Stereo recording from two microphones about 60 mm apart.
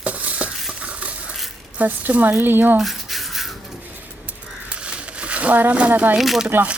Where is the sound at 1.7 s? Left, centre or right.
Right.